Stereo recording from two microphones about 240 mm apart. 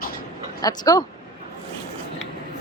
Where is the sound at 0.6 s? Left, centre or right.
Centre.